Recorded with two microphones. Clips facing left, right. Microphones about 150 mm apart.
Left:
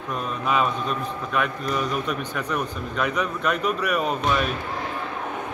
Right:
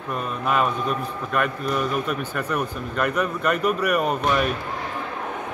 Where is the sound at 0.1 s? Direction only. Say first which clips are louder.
Right 1 dB; 5° right (ahead or behind).